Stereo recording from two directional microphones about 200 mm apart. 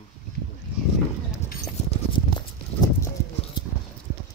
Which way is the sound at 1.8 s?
35° left (ahead or behind).